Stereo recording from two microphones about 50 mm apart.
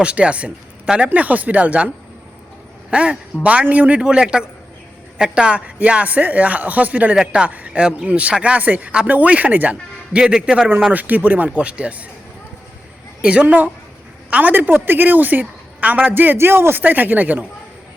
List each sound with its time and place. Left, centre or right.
0.0 s a man's voice: right
2.9 s a man's voice: right
4.0 s a man's voice: centre
7.8 s a man's voice: centre
10.2 s a man's voice: centre
10.9 s a woman's voice: right
13.2 s a woman's voice: right